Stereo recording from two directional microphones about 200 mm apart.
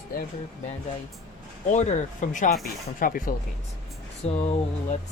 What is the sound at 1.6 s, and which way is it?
Speech, 35° left (ahead or behind).